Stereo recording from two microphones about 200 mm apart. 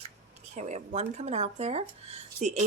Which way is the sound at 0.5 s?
35° right (ahead or behind).